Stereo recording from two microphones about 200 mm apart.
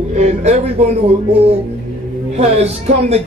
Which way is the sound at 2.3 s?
30° right (ahead or behind).